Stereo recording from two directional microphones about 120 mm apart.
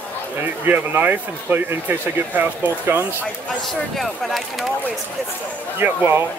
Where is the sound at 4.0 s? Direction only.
Centre (ahead or behind).